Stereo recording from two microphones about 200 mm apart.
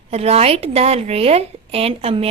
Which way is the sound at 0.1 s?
30° right (ahead or behind).